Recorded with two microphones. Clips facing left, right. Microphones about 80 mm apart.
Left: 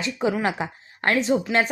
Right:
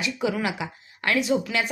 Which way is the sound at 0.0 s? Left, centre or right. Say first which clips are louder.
Left 2 dB; left.